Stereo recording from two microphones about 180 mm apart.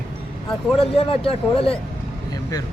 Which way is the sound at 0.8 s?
30° left (ahead or behind).